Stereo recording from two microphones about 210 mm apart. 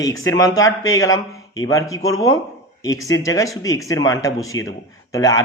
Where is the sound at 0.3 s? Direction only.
15° left (ahead or behind).